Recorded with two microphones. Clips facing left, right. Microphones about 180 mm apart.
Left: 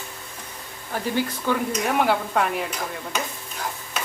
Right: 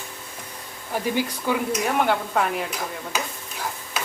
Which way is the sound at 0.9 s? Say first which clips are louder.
Right 1 dB; 10° right (ahead or behind).